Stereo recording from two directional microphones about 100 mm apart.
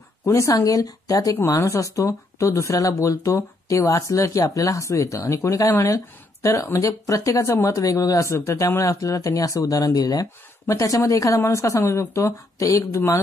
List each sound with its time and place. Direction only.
0.2 s a woman's voice: 30° left (ahead or behind)